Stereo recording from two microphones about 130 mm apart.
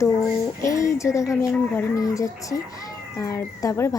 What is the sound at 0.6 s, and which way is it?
Music, 25° left (ahead or behind).